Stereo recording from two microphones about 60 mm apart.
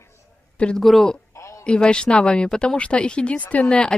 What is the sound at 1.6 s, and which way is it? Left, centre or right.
Speech, centre.